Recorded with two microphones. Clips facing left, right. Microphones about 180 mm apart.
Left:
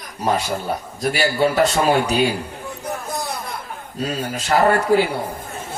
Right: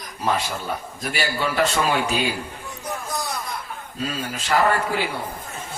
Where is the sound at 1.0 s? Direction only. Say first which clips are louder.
Left 8 dB; 45° left (ahead or behind).